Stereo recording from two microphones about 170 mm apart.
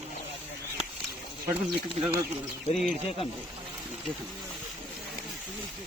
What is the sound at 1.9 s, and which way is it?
Speech, 35° right (ahead or behind).